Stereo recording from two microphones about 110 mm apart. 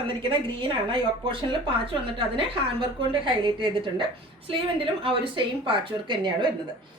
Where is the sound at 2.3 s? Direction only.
55° right (ahead or behind).